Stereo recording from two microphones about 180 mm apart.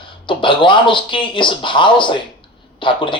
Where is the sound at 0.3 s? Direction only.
25° left (ahead or behind).